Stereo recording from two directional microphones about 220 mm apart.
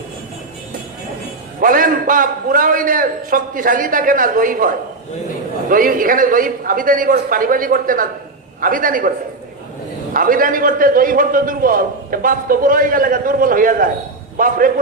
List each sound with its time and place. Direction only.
1.6 s a man's voice: 40° right (ahead or behind)
10.2 s a man's voice: 40° right (ahead or behind)